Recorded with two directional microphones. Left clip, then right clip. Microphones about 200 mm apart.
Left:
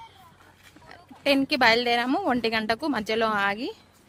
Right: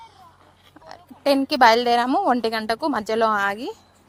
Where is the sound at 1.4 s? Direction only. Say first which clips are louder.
Right 6 dB; 10° right (ahead or behind).